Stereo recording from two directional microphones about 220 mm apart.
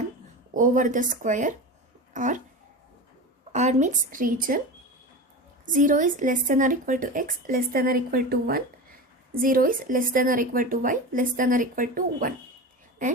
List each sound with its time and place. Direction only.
0.5 s speech: 35° right (ahead or behind)
3.5 s speech: 30° right (ahead or behind)
5.7 s speech: 35° right (ahead or behind)